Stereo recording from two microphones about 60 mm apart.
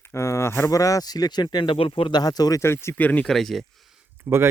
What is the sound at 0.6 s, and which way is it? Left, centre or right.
Speech, left.